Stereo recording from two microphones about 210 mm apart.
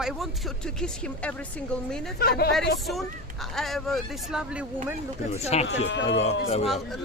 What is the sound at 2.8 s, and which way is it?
Speech, centre (ahead or behind).